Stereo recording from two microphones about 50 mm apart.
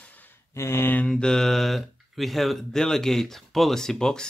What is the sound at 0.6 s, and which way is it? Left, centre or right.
Speech, left.